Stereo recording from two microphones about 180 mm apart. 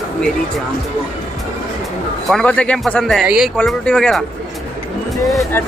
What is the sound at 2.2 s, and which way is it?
Speech, 5° left (ahead or behind).